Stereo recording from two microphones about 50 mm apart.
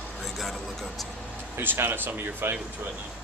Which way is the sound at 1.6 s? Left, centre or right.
Right.